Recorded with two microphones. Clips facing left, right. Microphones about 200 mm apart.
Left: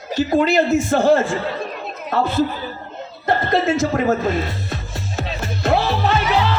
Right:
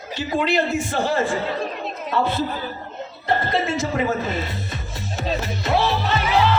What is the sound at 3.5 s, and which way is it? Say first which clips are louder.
Speech: left 5 dB; 50° left (ahead or behind).